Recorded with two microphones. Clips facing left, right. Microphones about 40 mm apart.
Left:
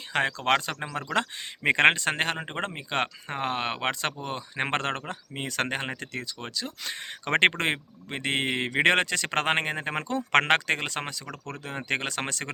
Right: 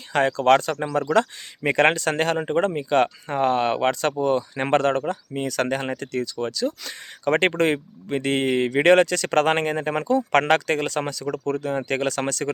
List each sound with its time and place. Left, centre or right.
0.1 s speech: left
1.1 s speech: left
10.7 s speech: left